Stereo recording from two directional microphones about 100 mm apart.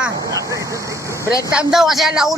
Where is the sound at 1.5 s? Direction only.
5° right (ahead or behind).